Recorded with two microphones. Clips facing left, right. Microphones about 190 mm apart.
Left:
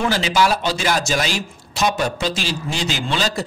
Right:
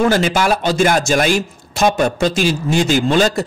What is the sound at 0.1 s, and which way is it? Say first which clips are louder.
Speech: right 3 dB; 50° right (ahead or behind).